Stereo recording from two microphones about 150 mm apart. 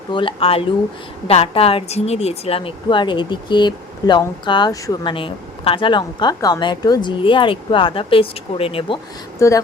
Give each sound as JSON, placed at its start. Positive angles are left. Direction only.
{"t": 0.1, "sound": "speech", "side_deg": 35}
{"t": 9.4, "sound": "speech", "side_deg": 20}